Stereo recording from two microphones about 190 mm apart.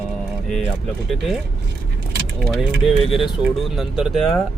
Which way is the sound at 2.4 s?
Centre (ahead or behind).